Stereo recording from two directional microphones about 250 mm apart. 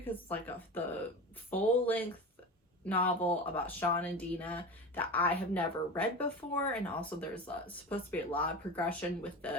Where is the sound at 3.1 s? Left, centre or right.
Centre.